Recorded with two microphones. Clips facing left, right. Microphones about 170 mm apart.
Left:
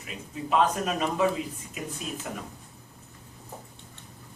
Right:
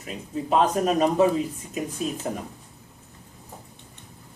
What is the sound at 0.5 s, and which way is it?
A man's voice, 40° right (ahead or behind).